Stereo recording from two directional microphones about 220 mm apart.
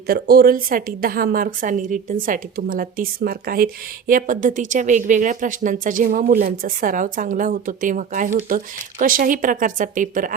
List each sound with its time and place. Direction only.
0.1 s speech: 45° right (ahead or behind)